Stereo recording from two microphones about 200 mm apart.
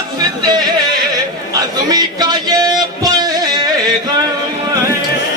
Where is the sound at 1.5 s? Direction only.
20° right (ahead or behind).